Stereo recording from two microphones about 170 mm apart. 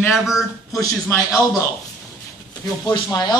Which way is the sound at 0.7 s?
20° left (ahead or behind).